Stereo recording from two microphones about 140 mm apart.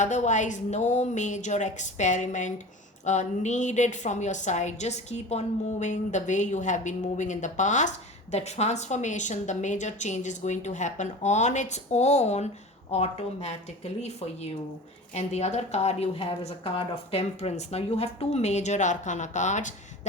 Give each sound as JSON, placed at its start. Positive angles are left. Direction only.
{"t": 0.0, "sound": "a woman's voice", "side_deg": 60}